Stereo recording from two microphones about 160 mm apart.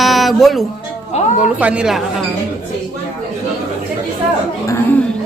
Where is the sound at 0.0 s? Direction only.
Centre (ahead or behind).